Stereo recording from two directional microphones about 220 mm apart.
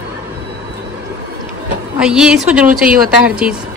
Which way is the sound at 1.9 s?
5° right (ahead or behind).